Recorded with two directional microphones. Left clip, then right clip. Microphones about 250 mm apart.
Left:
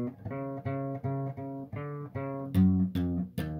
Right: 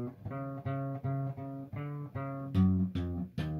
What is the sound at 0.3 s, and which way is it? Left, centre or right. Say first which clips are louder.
Music: left 3 dB; left.